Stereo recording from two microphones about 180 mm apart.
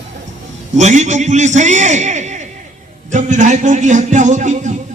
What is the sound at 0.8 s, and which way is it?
A man's voice, 40° right (ahead or behind).